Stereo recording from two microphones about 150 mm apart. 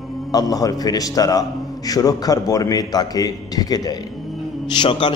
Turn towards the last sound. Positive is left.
turn(degrees=30)  # may be behind; listen again after turning